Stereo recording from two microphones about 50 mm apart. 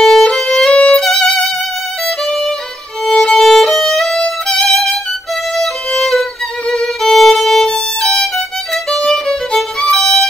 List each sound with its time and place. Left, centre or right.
0.0 s violin: centre
0.7 s violin: left
1.0 s violin: centre
2.0 s music: centre
3.1 s violin: centre
5.9 s violin: centre